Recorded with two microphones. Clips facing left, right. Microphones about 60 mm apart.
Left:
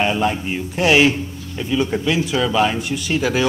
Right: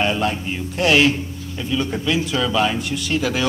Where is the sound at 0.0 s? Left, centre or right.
Centre.